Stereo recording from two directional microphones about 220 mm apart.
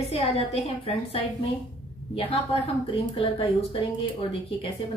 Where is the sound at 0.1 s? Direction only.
25° left (ahead or behind).